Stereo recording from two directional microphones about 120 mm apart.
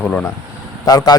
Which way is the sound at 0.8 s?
30° left (ahead or behind).